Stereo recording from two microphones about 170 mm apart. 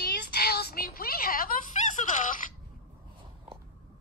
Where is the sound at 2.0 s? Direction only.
45° left (ahead or behind).